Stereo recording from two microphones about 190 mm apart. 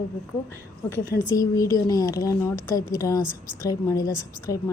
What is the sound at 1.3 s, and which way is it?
A woman's voice, 20° left (ahead or behind).